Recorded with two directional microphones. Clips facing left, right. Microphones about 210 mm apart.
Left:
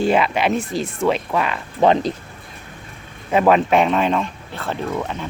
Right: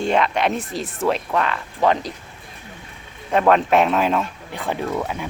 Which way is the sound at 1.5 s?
25° left (ahead or behind).